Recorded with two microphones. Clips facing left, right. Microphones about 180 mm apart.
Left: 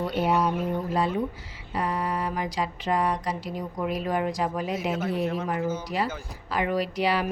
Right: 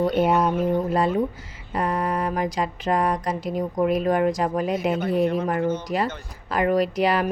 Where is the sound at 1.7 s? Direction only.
50° right (ahead or behind).